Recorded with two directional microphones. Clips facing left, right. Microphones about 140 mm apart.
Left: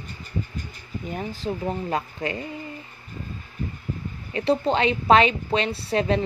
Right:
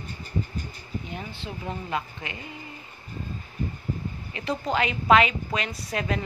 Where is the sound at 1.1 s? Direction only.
40° left (ahead or behind).